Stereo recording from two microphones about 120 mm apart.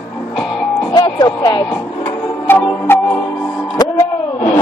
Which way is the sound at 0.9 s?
35° left (ahead or behind).